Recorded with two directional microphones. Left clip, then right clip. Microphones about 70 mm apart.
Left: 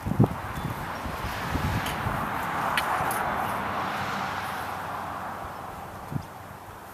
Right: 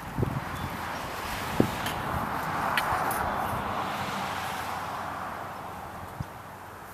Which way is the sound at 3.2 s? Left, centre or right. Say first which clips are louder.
Left 2 dB; right.